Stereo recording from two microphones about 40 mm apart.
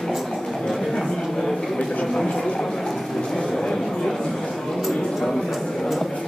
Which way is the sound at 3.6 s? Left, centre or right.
Centre.